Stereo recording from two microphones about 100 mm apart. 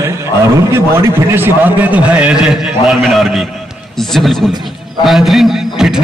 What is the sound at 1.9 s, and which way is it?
A man's voice, 15° right (ahead or behind).